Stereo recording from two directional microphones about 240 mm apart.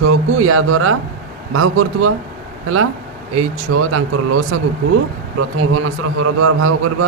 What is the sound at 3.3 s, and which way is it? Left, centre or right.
A man's voice, right.